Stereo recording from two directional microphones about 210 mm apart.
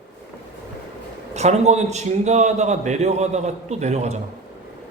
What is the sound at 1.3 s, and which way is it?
A man's voice, 30° right (ahead or behind).